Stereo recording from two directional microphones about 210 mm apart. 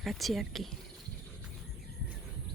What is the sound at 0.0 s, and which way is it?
Speech, centre (ahead or behind).